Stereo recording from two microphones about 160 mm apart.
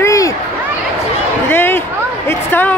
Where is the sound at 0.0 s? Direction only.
20° left (ahead or behind).